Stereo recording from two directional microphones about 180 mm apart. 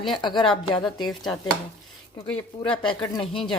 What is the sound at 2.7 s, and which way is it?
Speech, 25° left (ahead or behind).